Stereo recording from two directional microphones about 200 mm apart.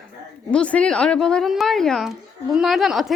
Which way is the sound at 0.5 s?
5° left (ahead or behind).